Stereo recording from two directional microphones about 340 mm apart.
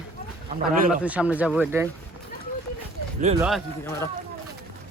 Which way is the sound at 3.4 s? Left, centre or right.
Centre.